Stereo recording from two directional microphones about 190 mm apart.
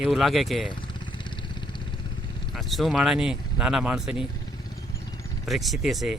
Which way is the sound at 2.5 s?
Centre (ahead or behind).